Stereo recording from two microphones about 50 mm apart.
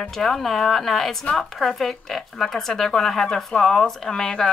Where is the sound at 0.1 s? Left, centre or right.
Centre.